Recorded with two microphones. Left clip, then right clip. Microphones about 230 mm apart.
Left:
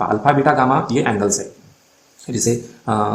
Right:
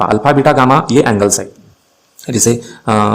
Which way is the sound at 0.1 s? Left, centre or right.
Right.